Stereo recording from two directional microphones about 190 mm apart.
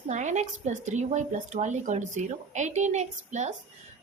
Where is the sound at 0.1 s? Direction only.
40° right (ahead or behind).